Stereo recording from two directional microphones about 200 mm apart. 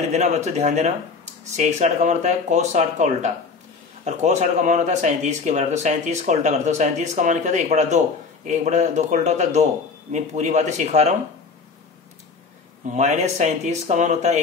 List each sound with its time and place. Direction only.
0.1 s speech: 35° right (ahead or behind)
12.8 s speech: 35° right (ahead or behind)